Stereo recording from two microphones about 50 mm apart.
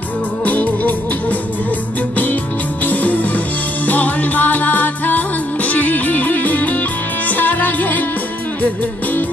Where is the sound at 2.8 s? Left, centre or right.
Left.